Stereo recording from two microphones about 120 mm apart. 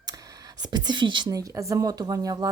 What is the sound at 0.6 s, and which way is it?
Speech, 35° right (ahead or behind).